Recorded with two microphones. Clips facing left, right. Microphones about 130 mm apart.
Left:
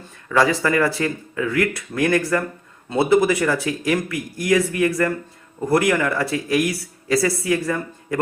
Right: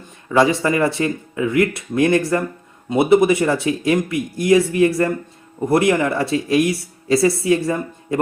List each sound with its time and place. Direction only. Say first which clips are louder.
0.3 s speech: right 2 dB; 25° right (ahead or behind)